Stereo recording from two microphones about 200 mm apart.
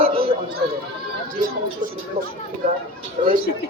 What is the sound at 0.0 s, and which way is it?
Chatter, 30° right (ahead or behind).